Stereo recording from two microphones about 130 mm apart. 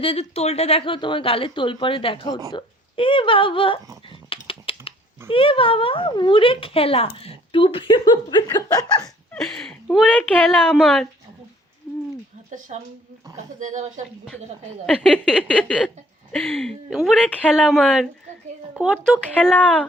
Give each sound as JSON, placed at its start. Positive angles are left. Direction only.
{"t": 0.0, "sound": "speech", "side_deg": 45}
{"t": 4.3, "sound": "typing", "side_deg": 45}
{"t": 5.3, "sound": "speech", "side_deg": 45}
{"t": 9.3, "sound": "speech", "side_deg": 5}
{"t": 12.5, "sound": "a woman's voice", "side_deg": -75}
{"t": 14.8, "sound": "a sound", "side_deg": 10}
{"t": 16.3, "sound": "speech", "side_deg": 5}
{"t": 19.0, "sound": "a sound", "side_deg": 10}